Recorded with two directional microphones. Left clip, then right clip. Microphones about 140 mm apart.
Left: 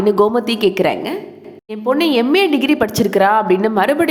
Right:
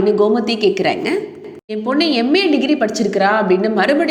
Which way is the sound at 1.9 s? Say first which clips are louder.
Left 2 dB; 20° left (ahead or behind).